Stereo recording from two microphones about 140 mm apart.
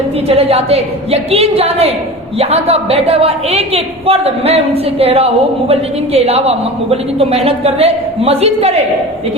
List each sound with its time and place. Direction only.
0.3 s speech: 45° right (ahead or behind)